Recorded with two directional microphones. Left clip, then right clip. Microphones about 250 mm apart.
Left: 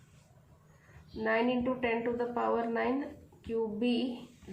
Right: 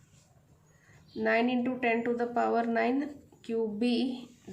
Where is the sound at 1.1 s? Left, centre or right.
Right.